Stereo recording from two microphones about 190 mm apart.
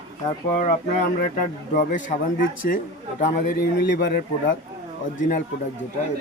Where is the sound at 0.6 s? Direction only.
45° left (ahead or behind).